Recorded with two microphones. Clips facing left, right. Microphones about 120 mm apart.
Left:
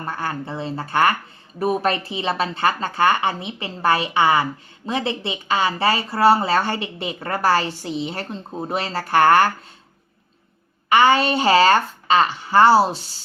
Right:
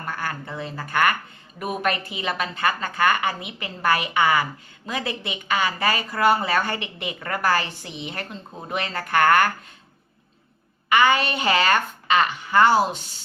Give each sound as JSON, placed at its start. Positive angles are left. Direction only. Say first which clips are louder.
{"t": 0.0, "sound": "a woman's voice", "louder": "left 3 dB", "side_deg": 25}
{"t": 10.8, "sound": "speech", "louder": "left 4 dB", "side_deg": 35}